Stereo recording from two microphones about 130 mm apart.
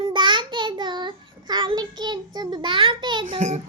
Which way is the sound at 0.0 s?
40° right (ahead or behind).